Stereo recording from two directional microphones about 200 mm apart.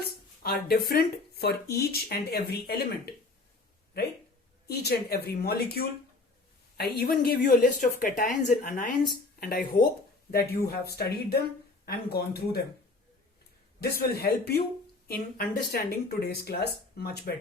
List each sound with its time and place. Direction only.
0.4 s speech: 50° left (ahead or behind)
4.7 s speech: 55° left (ahead or behind)
13.8 s speech: 55° left (ahead or behind)